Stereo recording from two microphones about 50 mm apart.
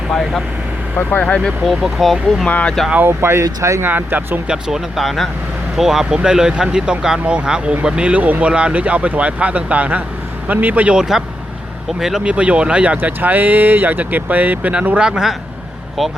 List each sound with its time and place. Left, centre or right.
0.1 s speech: centre
1.6 s speech: centre
2.5 s speech: left
3.0 s speech: right
3.8 s speech: right
4.4 s speech: centre
4.9 s speech: centre
8.1 s speech: right
11.9 s speech: centre
12.2 s speech: right
13.0 s speech: right
15.0 s speech: centre
16.0 s speech: centre